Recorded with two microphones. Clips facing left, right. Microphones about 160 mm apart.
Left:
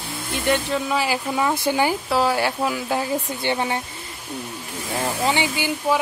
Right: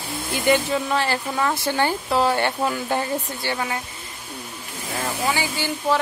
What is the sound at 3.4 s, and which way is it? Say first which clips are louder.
Speech: left 4 dB; 25° left (ahead or behind).